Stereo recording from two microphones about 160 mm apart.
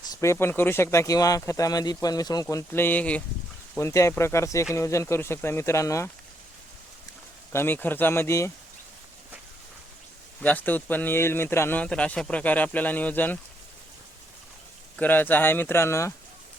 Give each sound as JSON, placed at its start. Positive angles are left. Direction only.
{"t": 0.1, "sound": "speech", "side_deg": 20}
{"t": 7.5, "sound": "speech", "side_deg": 15}
{"t": 10.4, "sound": "speech", "side_deg": 10}
{"t": 14.9, "sound": "speech", "side_deg": 10}